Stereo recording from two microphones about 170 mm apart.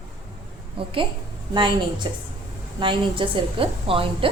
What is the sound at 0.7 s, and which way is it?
A woman's voice, 30° right (ahead or behind).